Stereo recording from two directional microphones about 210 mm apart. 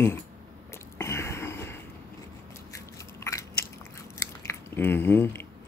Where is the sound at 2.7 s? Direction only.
15° left (ahead or behind).